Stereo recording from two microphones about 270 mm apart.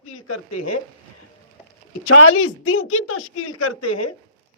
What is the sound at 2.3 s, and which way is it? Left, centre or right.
A woman's voice, left.